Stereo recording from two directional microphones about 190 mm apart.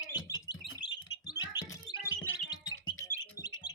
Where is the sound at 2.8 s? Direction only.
90° left.